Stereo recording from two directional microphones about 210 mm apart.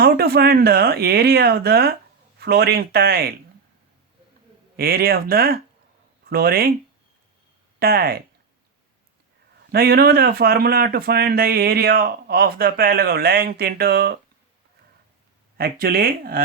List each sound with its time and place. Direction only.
0.0 s speech: 45° right (ahead or behind)
4.8 s speech: 45° right (ahead or behind)
7.8 s speech: 45° right (ahead or behind)
9.7 s speech: 45° right (ahead or behind)
15.5 s speech: 45° right (ahead or behind)